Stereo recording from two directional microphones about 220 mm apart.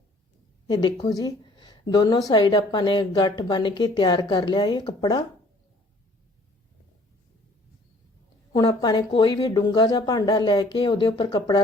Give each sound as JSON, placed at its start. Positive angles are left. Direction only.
{"t": 0.7, "sound": "speech", "side_deg": 20}
{"t": 8.5, "sound": "speech", "side_deg": 20}